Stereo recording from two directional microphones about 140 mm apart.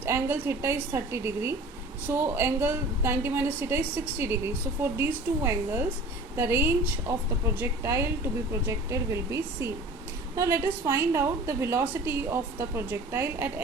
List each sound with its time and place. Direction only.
0.0 s a woman's voice: 15° right (ahead or behind)